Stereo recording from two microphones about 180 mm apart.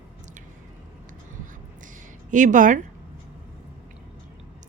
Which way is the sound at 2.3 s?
45° right (ahead or behind).